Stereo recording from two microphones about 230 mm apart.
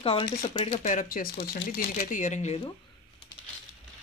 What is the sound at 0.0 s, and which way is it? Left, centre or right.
Speech, left.